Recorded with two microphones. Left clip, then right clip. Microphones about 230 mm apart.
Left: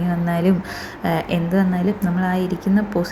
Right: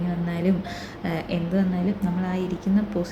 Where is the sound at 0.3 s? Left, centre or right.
Centre.